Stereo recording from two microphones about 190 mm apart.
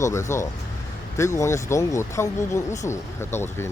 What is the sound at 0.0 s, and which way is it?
Speech, 15° left (ahead or behind).